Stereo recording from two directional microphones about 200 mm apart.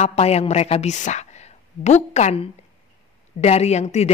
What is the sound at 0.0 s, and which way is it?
A woman's voice, 30° left (ahead or behind).